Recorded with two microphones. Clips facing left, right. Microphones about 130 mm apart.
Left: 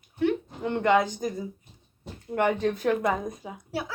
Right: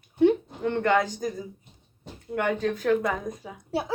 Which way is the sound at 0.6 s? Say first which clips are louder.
Left 2 dB; 15° left (ahead or behind).